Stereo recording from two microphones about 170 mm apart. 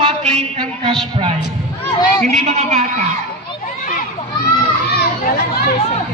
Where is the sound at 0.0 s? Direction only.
40° right (ahead or behind).